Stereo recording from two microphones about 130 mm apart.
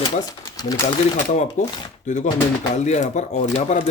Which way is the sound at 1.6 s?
75° left (ahead or behind).